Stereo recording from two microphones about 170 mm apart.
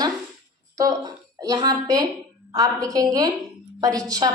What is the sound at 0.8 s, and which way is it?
A woman's voice, 20° right (ahead or behind).